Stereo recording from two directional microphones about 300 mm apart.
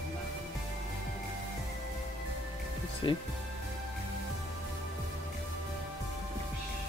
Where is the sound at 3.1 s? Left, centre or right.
Centre.